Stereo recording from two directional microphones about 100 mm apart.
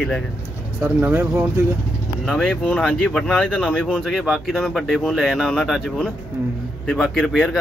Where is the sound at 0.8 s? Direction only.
25° right (ahead or behind).